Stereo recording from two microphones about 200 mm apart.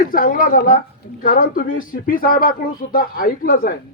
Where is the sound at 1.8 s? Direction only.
45° left (ahead or behind).